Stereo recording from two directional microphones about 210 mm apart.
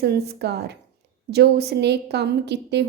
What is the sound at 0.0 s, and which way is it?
A woman's voice, 50° right (ahead or behind).